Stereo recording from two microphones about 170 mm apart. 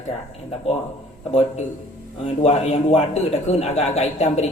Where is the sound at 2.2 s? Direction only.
40° left (ahead or behind).